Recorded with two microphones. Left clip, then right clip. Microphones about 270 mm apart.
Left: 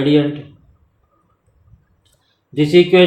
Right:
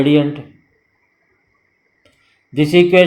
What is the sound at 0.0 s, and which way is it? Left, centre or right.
Speech, right.